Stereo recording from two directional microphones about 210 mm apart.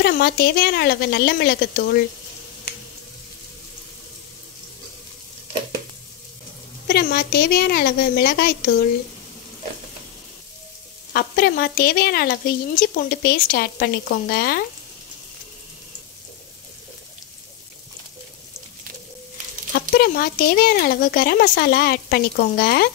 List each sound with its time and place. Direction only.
0.0 s speech: 50° left (ahead or behind)
6.9 s speech: 50° left (ahead or behind)
11.1 s speech: 45° left (ahead or behind)
20.0 s speech: 45° left (ahead or behind)